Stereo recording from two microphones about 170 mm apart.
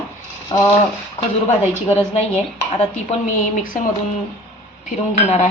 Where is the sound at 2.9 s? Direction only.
50° left (ahead or behind).